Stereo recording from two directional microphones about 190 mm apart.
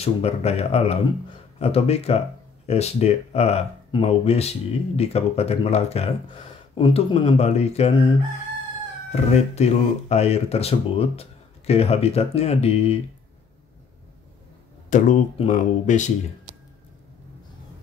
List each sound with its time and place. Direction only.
0.0 s speech: 35° left (ahead or behind)
9.1 s speech: 35° left (ahead or behind)
14.9 s speech: 40° left (ahead or behind)